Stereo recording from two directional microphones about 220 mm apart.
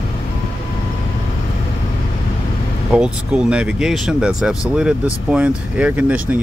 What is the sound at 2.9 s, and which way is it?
Speech, 5° right (ahead or behind).